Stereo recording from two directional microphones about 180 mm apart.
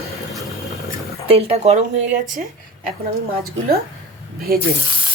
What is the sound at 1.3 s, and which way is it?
Speech, 35° right (ahead or behind).